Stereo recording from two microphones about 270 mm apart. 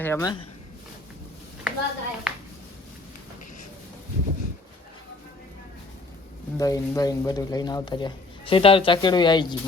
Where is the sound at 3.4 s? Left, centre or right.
Left.